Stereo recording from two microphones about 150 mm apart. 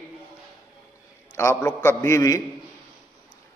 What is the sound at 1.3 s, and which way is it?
A man's voice, 15° left (ahead or behind).